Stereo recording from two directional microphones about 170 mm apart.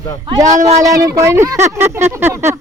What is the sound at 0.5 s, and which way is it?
Speech, 40° right (ahead or behind).